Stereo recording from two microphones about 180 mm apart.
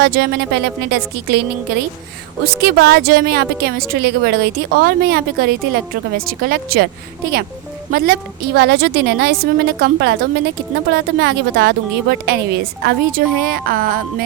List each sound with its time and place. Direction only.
0.0 s speech: 60° right (ahead or behind)
7.9 s speech: 60° right (ahead or behind)